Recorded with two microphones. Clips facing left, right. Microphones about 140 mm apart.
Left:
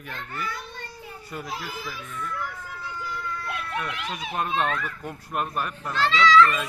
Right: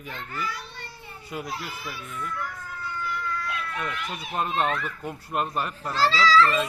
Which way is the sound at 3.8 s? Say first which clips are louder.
Even; centre (ahead or behind).